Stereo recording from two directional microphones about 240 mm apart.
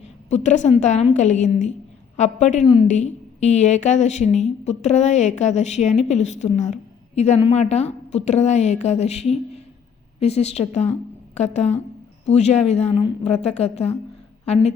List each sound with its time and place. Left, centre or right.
0.3 s a woman's voice: left